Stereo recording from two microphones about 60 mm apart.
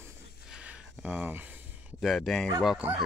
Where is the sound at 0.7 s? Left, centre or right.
Right.